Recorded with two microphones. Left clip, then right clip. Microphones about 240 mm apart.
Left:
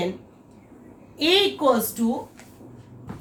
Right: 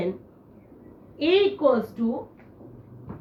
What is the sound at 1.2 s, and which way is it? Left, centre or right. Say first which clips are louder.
Speech: left 1 dB; left.